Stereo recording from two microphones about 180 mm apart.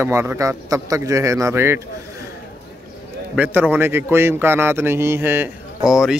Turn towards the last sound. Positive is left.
turn(degrees=-5)  # may be behind; listen again after turning